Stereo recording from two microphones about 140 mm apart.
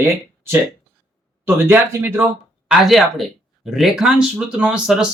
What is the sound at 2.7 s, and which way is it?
Speech, centre (ahead or behind).